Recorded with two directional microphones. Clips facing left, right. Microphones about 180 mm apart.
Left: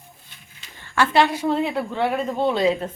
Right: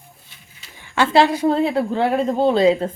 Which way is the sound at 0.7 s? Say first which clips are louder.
Right 1 dB; 10° right (ahead or behind).